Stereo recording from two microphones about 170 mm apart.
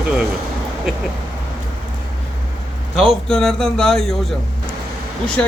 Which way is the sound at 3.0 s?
Centre (ahead or behind).